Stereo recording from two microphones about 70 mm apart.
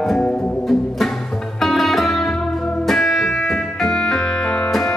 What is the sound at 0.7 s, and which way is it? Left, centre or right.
Music, centre.